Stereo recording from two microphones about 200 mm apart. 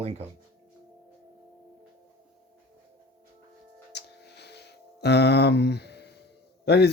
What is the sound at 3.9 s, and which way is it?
Music, 55° left (ahead or behind).